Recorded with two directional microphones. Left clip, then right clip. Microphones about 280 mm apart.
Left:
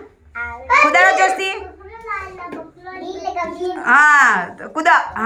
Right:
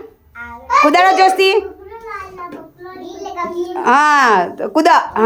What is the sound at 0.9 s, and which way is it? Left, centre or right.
Speech, right.